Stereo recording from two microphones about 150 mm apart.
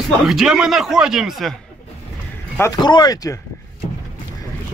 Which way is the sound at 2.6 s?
25° left (ahead or behind).